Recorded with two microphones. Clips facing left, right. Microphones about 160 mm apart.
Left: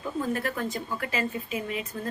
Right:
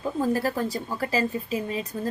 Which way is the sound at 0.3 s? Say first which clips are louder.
Right 4 dB; 35° right (ahead or behind).